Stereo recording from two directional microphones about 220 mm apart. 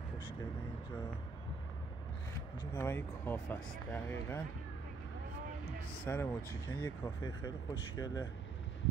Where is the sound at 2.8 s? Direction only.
10° left (ahead or behind).